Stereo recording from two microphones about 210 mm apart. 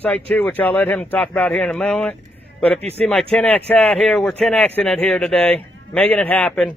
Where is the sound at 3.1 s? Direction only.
5° left (ahead or behind).